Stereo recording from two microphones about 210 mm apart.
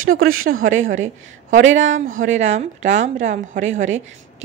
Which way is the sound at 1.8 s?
35° right (ahead or behind).